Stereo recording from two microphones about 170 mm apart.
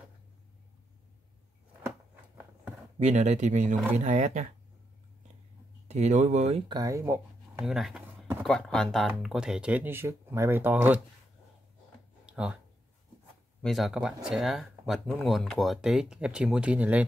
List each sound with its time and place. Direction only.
3.0 s speech: 40° right (ahead or behind)
5.9 s speech: 40° right (ahead or behind)
6.8 s speech: 15° right (ahead or behind)
7.6 s speech: 5° right (ahead or behind)
12.3 s a sound: 5° right (ahead or behind)
13.6 s speech: centre (ahead or behind)